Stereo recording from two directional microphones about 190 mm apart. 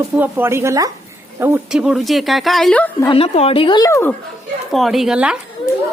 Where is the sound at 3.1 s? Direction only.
30° left (ahead or behind); by 4.1 s 15° left (ahead or behind).